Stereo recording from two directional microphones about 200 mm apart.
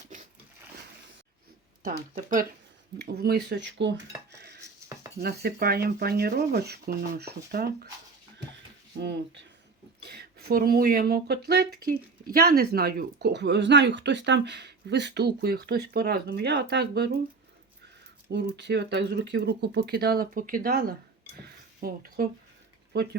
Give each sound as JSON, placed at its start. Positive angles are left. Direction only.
{"t": 0.1, "sound": "a sound", "side_deg": -40}
{"t": 1.8, "sound": "speech", "side_deg": -40}
{"t": 4.4, "sound": "cutlery", "side_deg": -55}
{"t": 5.2, "sound": "speech", "side_deg": -50}
{"t": 10.1, "sound": "speech", "side_deg": -50}
{"t": 18.3, "sound": "speech", "side_deg": -60}
{"t": 21.4, "sound": "a sound", "side_deg": -50}